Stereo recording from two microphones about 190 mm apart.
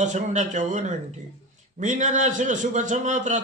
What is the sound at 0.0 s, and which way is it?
A man's voice, 40° right (ahead or behind).